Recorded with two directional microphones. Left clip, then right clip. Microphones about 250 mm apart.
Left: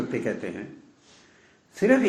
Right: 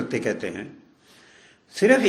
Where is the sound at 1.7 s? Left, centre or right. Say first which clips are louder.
Right 3 dB; right.